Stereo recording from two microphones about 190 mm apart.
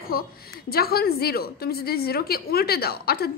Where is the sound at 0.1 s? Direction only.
55° left (ahead or behind).